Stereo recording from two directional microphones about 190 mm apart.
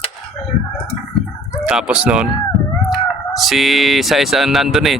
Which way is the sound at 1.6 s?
5° right (ahead or behind).